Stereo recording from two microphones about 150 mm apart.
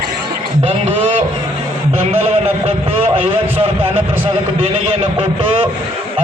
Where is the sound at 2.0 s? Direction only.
40° right (ahead or behind).